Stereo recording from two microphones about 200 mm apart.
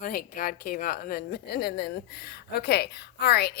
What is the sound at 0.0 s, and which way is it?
Speech, 45° left (ahead or behind).